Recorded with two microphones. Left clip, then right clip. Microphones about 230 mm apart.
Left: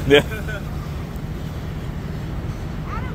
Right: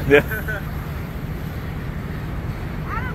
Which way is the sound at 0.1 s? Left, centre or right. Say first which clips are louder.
Even; centre.